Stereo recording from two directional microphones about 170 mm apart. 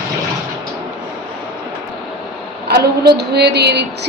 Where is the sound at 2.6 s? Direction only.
70° right (ahead or behind).